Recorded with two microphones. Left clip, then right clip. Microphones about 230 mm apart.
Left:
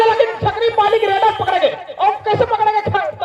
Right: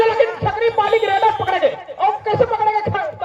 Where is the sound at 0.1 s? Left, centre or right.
Left.